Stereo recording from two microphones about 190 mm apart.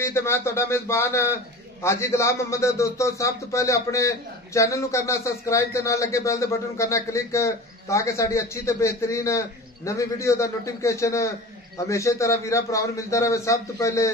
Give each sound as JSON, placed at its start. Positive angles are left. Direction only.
{"t": 0.0, "sound": "a man's voice", "side_deg": 15}